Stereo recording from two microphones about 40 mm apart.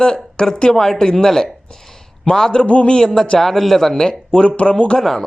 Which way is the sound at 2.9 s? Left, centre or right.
Centre.